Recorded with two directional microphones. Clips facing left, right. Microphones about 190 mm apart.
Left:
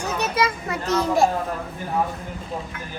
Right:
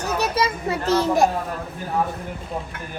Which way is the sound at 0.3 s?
30° right (ahead or behind).